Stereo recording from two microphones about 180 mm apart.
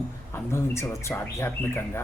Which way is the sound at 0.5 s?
15° left (ahead or behind).